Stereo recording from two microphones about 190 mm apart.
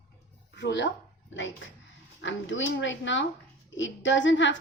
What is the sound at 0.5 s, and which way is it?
Speech, 70° left (ahead or behind).